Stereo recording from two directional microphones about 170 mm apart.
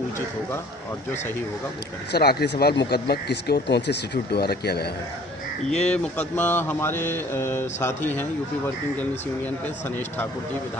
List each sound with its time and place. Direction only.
2.1 s speech: 70° left (ahead or behind)
5.7 s mantra: 5° left (ahead or behind)